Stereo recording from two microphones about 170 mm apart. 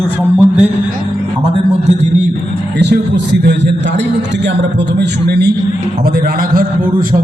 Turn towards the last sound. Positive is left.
turn(degrees=-70)  # may be behind; listen again after turning